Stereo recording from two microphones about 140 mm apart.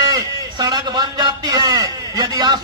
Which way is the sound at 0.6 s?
30° right (ahead or behind).